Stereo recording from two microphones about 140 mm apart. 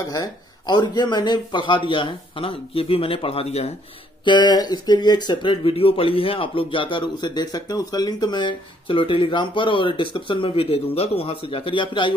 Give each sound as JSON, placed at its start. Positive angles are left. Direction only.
{"t": 0.1, "sound": "speech", "side_deg": 30}
{"t": 4.2, "sound": "speech", "side_deg": 35}